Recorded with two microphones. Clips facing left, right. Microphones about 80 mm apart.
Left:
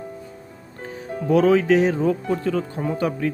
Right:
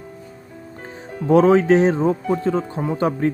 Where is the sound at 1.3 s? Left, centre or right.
Right.